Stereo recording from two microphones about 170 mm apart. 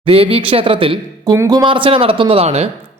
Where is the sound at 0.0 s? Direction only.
30° right (ahead or behind).